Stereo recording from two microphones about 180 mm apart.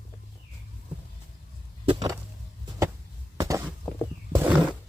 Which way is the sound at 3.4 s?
20° right (ahead or behind).